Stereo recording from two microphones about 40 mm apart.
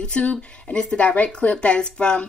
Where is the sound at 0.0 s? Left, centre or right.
Left.